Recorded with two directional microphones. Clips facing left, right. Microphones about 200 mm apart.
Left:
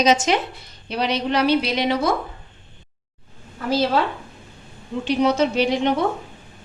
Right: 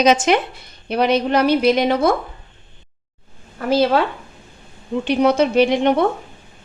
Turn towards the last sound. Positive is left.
turn(degrees=-60)  # may be behind; listen again after turning